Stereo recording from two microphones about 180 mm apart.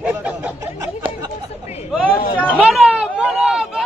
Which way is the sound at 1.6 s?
35° left (ahead or behind).